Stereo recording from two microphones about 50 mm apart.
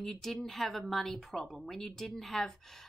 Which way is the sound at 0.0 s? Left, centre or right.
Centre.